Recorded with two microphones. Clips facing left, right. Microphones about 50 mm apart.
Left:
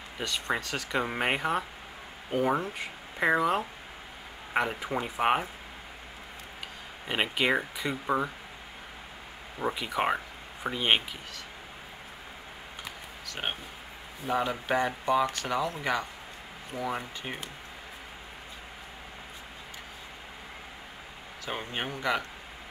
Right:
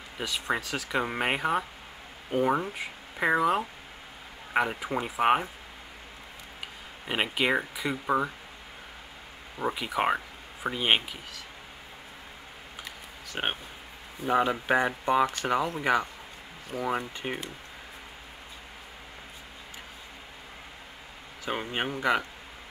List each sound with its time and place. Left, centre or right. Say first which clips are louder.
0.2 s speech: right 1 dB; centre
7.1 s speech: even; centre
9.6 s speech: right 1 dB; centre
13.3 s speech: right 3 dB; right
21.5 s speech: right 3 dB; centre